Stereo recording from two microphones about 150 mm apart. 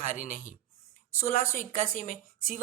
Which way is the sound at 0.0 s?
60° left (ahead or behind).